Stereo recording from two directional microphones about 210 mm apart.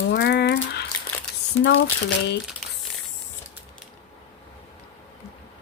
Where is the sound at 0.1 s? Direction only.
50° left (ahead or behind).